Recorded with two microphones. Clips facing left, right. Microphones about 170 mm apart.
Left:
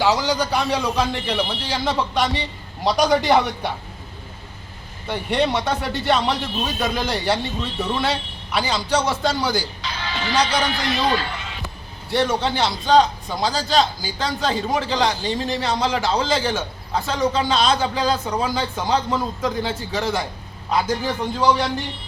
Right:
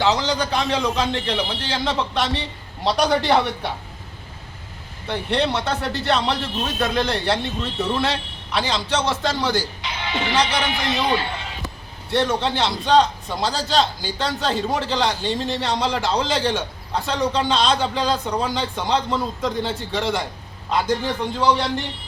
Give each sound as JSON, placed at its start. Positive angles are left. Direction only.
{"t": 0.0, "sound": "a man's voice", "side_deg": 5}
{"t": 5.0, "sound": "a man's voice", "side_deg": 5}
{"t": 9.8, "sound": "a man's voice", "side_deg": -20}
{"t": 12.1, "sound": "a man's voice", "side_deg": 0}